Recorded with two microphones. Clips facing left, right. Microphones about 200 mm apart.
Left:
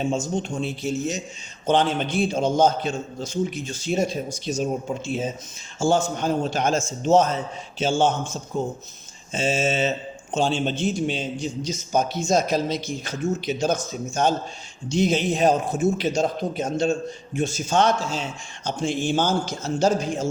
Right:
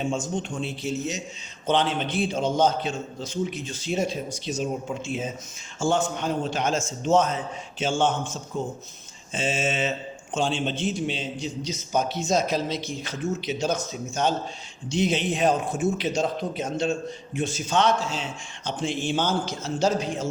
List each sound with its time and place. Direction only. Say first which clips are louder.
0.3 s a man's voice: left 3 dB; 40° left (ahead or behind)